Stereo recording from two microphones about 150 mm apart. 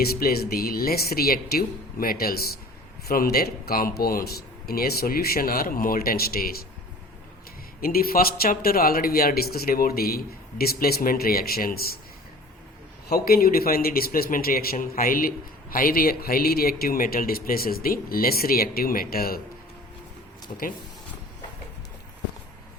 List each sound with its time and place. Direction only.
0.0 s speech: 90° left
7.8 s speech: 75° left (ahead or behind)
13.1 s speech: 85° left